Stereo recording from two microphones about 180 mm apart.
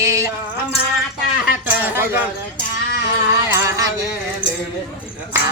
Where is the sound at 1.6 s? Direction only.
10° right (ahead or behind).